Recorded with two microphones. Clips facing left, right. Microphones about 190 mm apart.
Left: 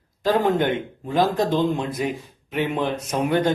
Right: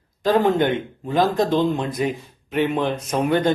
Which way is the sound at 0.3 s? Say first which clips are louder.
Right 2 dB; 5° left (ahead or behind).